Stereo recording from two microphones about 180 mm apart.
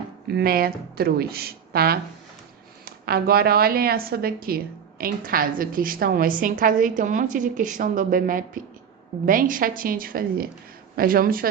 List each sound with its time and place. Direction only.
0.3 s a woman's voice: 60° right (ahead or behind)